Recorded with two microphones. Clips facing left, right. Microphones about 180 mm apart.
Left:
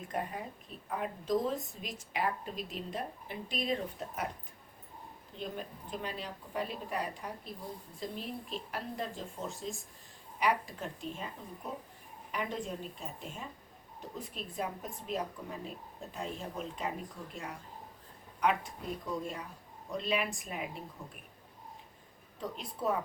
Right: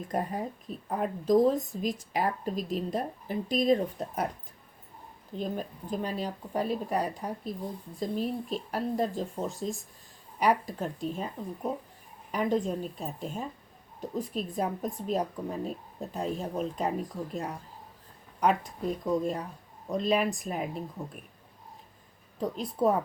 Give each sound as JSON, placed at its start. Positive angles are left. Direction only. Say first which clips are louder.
{"t": 0.1, "sound": "speech", "louder": "right 6 dB", "side_deg": -40}
{"t": 5.4, "sound": "speech", "louder": "right 7 dB", "side_deg": -40}
{"t": 22.4, "sound": "speech", "louder": "right 10 dB", "side_deg": -40}